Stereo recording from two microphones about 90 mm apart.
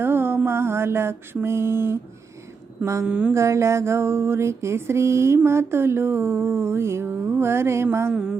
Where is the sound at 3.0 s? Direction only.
15° right (ahead or behind).